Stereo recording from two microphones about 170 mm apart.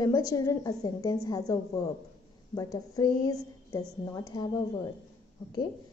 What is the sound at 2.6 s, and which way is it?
A woman's voice, 20° left (ahead or behind).